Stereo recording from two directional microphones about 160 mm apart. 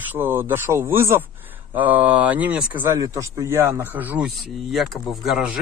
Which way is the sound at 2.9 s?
20° right (ahead or behind).